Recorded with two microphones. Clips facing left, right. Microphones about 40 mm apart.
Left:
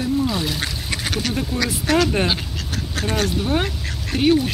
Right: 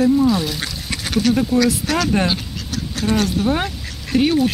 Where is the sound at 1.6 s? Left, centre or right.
Centre.